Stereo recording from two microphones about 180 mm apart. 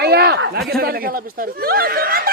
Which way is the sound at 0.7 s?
60° right (ahead or behind).